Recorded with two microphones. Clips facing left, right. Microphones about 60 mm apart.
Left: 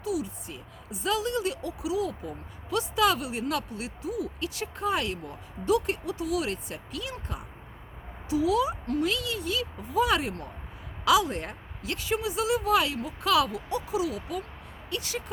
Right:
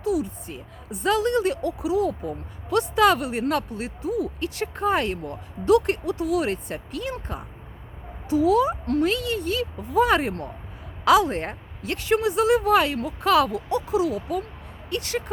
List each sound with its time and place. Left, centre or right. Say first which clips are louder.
0.0 s speech: right 6 dB; right
5.2 s speech: right 6 dB; right
14.8 s speech: right 6 dB; right